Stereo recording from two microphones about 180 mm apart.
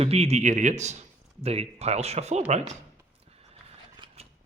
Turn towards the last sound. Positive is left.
turn(degrees=-35)  # may be behind; listen again after turning